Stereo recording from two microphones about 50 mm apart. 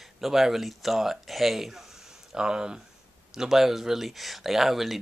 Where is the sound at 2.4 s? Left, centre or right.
Centre.